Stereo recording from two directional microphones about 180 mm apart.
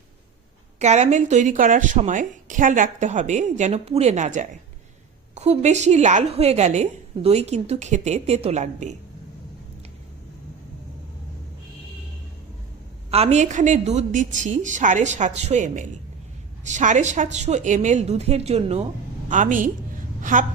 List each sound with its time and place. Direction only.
0.8 s a woman's voice: 40° right (ahead or behind)
13.1 s a woman's voice: 35° right (ahead or behind)